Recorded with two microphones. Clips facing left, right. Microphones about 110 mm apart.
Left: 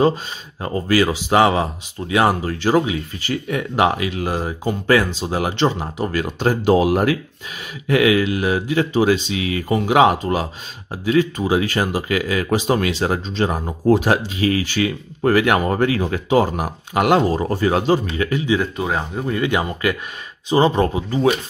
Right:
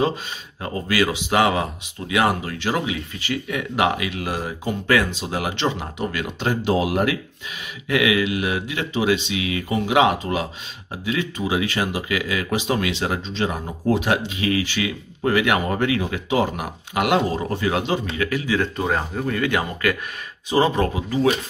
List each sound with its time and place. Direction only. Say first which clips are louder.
0.0 s speech: left 5 dB; 35° left (ahead or behind)
18.6 s speech: left 1 dB; 5° left (ahead or behind)
19.2 s speech: left 4 dB; 20° left (ahead or behind)